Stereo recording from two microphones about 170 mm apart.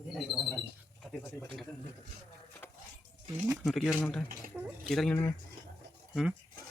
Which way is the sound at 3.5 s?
Centre (ahead or behind).